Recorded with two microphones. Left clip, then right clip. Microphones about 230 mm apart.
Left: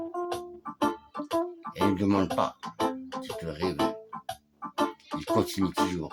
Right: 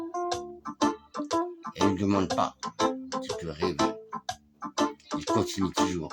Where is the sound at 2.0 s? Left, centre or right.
Centre.